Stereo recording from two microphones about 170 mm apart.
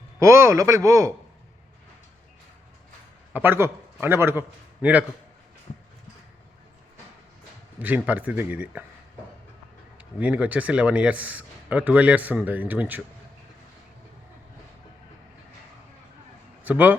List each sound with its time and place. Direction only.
0.2 s speech: 15° right (ahead or behind)
3.3 s a man's voice: 10° right (ahead or behind)
7.8 s speech: 10° right (ahead or behind)
10.0 s speech: 5° right (ahead or behind)
16.6 s speech: 10° right (ahead or behind)